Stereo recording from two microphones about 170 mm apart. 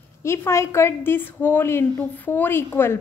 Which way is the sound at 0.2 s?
15° left (ahead or behind).